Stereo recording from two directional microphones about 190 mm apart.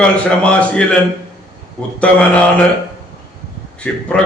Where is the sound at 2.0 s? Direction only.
5° left (ahead or behind).